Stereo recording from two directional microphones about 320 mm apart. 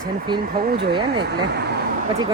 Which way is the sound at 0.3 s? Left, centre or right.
Right.